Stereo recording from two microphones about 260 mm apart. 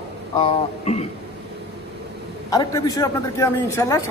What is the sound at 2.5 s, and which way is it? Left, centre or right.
Speech, centre.